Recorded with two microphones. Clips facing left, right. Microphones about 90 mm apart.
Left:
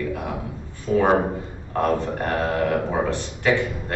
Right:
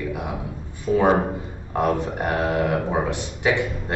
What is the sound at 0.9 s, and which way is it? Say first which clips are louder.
A man's voice: even; 10° right (ahead or behind).